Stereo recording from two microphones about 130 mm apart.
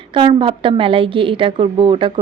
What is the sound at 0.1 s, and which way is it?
A woman's voice, 40° right (ahead or behind).